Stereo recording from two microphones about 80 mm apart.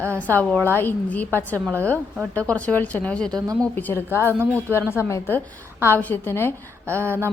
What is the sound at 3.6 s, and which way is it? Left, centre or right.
A woman's voice, left.